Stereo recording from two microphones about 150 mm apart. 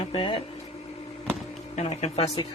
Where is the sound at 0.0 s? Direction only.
35° left (ahead or behind).